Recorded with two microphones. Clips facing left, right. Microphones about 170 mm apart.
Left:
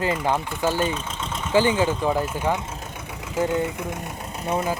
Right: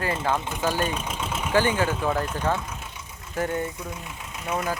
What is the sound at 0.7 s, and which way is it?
Speech, 15° right (ahead or behind).